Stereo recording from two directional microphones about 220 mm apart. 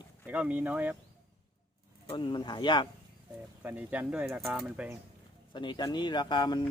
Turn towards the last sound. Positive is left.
turn(degrees=20)  # may be behind; listen again after turning